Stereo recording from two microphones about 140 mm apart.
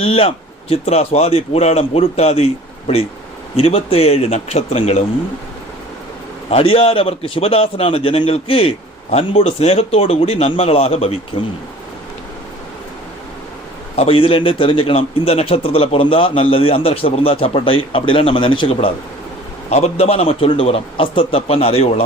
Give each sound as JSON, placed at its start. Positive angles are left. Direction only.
{"t": 0.0, "sound": "a man's voice", "side_deg": 45}
{"t": 6.5, "sound": "a man's voice", "side_deg": 45}
{"t": 13.9, "sound": "a man's voice", "side_deg": 45}